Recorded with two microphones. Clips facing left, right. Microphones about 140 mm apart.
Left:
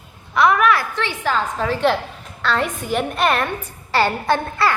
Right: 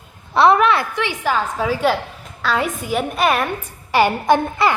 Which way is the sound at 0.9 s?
15° right (ahead or behind).